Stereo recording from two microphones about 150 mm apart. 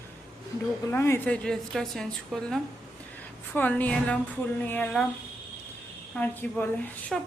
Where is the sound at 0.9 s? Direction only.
15° left (ahead or behind).